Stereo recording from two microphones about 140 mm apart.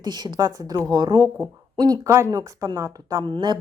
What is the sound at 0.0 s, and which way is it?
A woman's voice, 30° right (ahead or behind).